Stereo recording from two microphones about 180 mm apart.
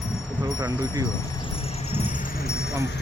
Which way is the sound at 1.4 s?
35° left (ahead or behind).